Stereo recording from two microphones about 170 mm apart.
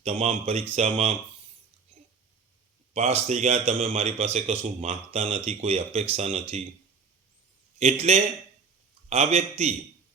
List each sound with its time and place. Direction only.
0.0 s speech: 35° right (ahead or behind)
2.9 s speech: 40° right (ahead or behind)
7.8 s speech: 40° right (ahead or behind)